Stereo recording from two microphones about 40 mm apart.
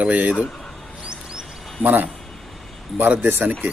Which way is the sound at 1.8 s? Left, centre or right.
Right.